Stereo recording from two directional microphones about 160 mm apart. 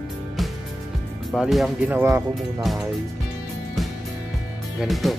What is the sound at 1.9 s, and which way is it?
Speech, 15° right (ahead or behind).